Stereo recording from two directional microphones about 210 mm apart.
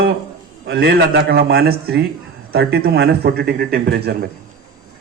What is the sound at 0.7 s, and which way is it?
A man's voice, 50° right (ahead or behind).